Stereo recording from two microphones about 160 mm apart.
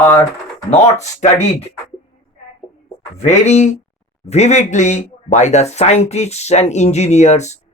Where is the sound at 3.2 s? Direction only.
45° left (ahead or behind).